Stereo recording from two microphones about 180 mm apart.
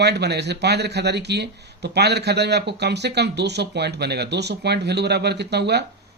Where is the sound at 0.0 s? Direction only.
65° right (ahead or behind).